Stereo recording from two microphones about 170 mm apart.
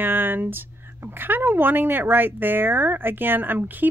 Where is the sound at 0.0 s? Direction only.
10° right (ahead or behind).